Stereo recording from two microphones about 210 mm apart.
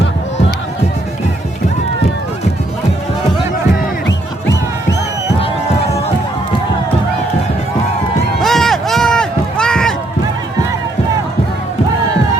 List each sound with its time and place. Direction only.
4.0 s music: 55° left (ahead or behind)
8.4 s run: centre (ahead or behind)